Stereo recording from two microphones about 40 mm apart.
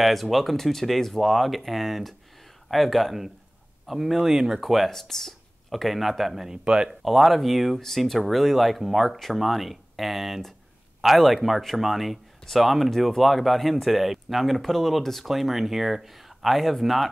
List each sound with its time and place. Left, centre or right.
0.0 s speech: centre
6.5 s speech: centre
7.1 s speech: centre